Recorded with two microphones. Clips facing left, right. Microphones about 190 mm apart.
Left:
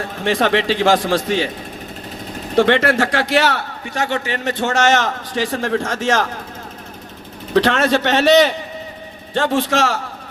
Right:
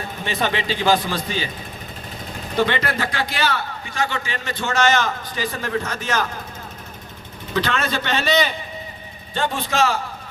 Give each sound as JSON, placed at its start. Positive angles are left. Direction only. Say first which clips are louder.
{"t": 0.0, "sound": "a man's voice", "louder": "left 6 dB", "side_deg": 90}
{"t": 2.6, "sound": "a man's voice", "louder": "left 7 dB", "side_deg": 75}
{"t": 7.5, "sound": "a man's voice", "louder": "left 8 dB", "side_deg": 75}